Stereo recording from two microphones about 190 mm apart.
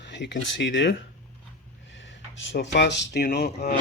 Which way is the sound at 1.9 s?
75° left (ahead or behind).